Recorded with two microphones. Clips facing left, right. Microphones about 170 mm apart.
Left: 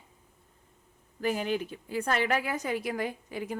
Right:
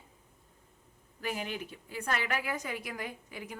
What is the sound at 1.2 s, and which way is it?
A woman's voice, 35° left (ahead or behind).